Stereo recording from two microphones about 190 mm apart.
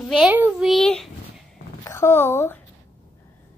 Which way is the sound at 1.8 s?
15° left (ahead or behind).